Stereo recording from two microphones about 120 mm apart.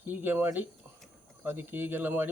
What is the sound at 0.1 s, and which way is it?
A man's voice, 15° right (ahead or behind).